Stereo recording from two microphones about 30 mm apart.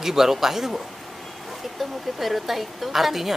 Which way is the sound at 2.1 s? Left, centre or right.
Centre.